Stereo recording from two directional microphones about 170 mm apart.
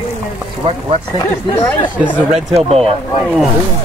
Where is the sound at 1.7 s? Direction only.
10° left (ahead or behind).